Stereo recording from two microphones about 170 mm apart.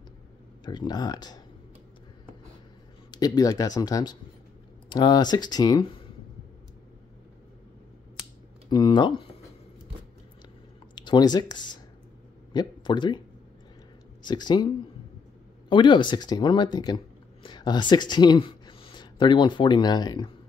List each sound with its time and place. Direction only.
0.7 s speech: 25° left (ahead or behind)
3.1 s speech: 25° left (ahead or behind)
8.6 s speech: 25° left (ahead or behind)
11.0 s speech: 25° left (ahead or behind)
14.2 s speech: 25° left (ahead or behind)
15.7 s speech: 30° left (ahead or behind)